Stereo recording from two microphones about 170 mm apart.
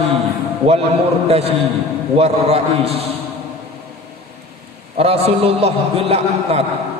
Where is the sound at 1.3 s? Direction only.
35° right (ahead or behind).